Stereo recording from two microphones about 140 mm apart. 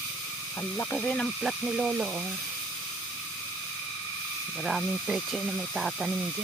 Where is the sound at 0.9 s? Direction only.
5° left (ahead or behind).